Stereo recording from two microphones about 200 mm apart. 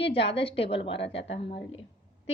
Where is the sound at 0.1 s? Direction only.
30° left (ahead or behind).